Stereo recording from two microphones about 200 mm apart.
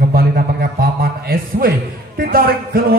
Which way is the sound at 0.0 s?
50° right (ahead or behind).